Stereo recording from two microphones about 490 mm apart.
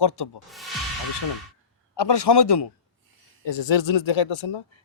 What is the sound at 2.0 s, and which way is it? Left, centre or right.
Speech, left.